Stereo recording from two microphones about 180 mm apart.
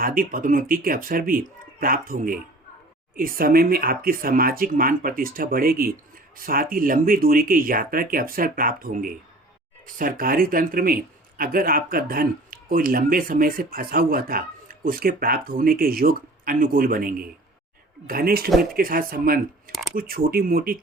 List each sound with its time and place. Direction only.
0.0 s speech: 50° right (ahead or behind)